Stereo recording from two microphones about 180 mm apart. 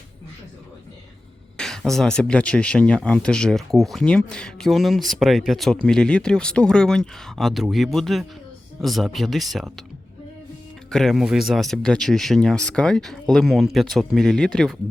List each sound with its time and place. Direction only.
1.5 s speech: 5° left (ahead or behind)
10.9 s speech: centre (ahead or behind)